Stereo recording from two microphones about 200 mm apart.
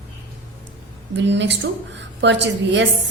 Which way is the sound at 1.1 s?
60° right (ahead or behind).